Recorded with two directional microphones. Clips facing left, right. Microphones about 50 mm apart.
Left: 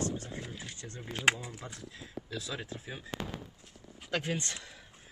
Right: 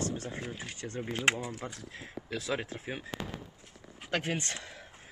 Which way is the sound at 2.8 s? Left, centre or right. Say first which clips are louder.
Right 5 dB; right.